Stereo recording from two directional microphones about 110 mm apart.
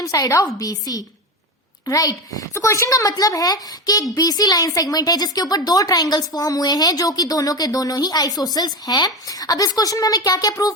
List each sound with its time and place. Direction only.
0.0 s speech: 30° left (ahead or behind)